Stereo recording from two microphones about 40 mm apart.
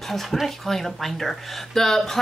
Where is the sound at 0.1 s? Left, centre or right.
Centre.